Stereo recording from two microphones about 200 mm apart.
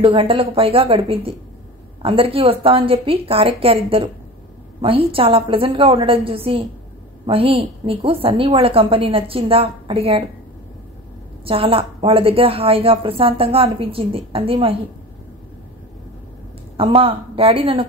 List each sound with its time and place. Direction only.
0.0 s a woman's voice: 25° right (ahead or behind)
11.4 s a woman's voice: 30° right (ahead or behind)
16.7 s a woman's voice: 30° right (ahead or behind)